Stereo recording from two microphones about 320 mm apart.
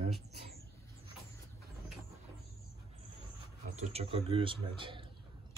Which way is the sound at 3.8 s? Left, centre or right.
Centre.